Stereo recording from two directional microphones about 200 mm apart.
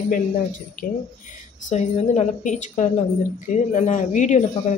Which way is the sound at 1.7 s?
35° left (ahead or behind).